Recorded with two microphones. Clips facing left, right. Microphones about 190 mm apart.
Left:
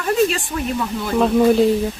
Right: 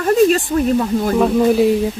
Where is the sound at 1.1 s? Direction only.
5° right (ahead or behind).